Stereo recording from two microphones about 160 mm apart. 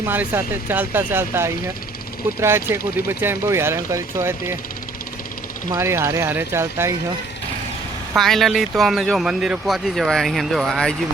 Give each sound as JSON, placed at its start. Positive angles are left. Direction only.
{"t": 0.0, "sound": "speech", "side_deg": -15}
{"t": 5.7, "sound": "speech", "side_deg": -15}
{"t": 8.1, "sound": "speech", "side_deg": 0}